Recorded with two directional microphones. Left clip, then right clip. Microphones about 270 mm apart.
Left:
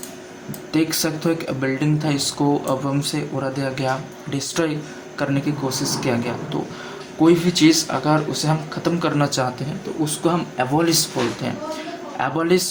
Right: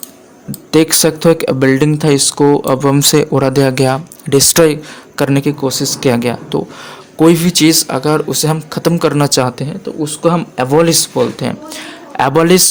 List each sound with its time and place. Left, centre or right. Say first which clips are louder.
0.7 s speech: right 11 dB; right